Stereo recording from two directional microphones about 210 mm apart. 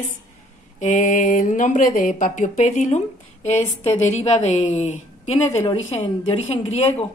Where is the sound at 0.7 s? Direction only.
40° left (ahead or behind).